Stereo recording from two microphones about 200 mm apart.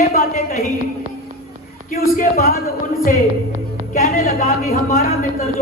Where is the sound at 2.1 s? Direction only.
45° left (ahead or behind).